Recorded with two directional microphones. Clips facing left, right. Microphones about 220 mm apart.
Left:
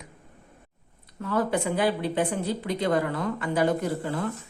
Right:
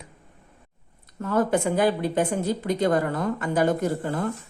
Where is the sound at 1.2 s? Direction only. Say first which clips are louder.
Right 3 dB; 45° right (ahead or behind).